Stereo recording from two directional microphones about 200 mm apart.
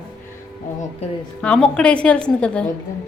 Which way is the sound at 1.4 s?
5° left (ahead or behind).